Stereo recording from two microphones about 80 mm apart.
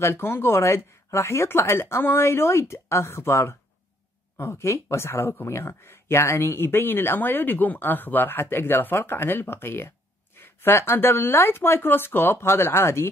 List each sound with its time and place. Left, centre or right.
0.0 s speech: left